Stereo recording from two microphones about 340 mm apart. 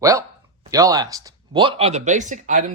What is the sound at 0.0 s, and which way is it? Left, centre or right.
Speech, centre.